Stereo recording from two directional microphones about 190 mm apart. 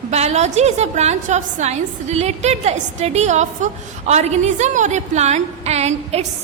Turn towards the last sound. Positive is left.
turn(degrees=-35)  # may be behind; listen again after turning